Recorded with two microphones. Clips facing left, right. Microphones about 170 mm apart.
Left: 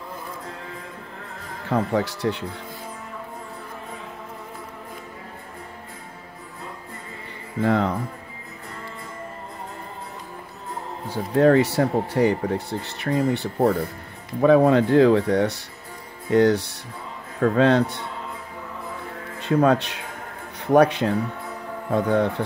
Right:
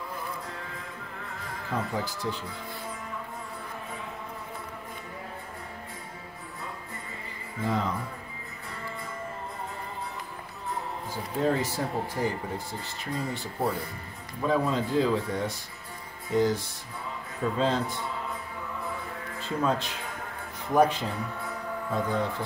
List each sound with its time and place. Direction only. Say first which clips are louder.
1.7 s speech: left 9 dB; 70° left (ahead or behind)
7.6 s speech: left 8 dB; 65° left (ahead or behind)
11.1 s speech: left 11 dB; 70° left (ahead or behind)
19.4 s speech: left 9 dB; 70° left (ahead or behind)